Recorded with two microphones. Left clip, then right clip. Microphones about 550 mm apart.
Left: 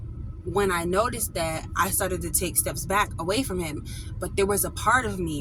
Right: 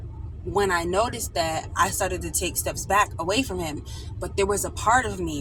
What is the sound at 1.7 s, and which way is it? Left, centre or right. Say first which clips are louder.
A woman's voice: right 2 dB; left.